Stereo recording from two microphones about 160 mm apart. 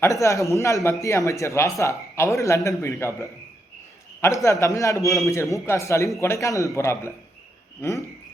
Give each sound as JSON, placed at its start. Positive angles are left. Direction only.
{"t": 0.0, "sound": "a man's voice", "side_deg": 20}
{"t": 4.6, "sound": "a man's voice", "side_deg": 20}